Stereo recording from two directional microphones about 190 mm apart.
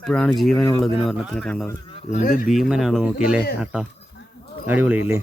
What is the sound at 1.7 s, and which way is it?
Speech, 25° left (ahead or behind).